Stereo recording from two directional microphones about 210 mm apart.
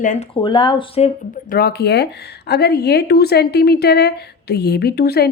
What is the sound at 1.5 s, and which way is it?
Speech, 45° left (ahead or behind).